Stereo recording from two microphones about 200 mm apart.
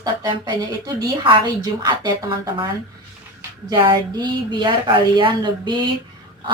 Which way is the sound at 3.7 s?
20° right (ahead or behind).